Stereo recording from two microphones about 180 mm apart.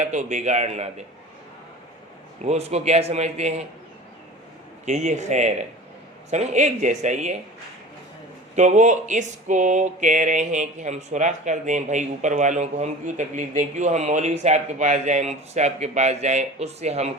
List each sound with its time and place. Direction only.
0.0 s speech: 40° right (ahead or behind)
2.4 s speech: 35° right (ahead or behind)
4.9 s speech: 40° right (ahead or behind)
8.5 s speech: 40° right (ahead or behind)